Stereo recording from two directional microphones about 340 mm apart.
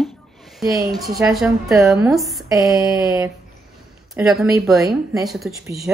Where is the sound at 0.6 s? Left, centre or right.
Centre.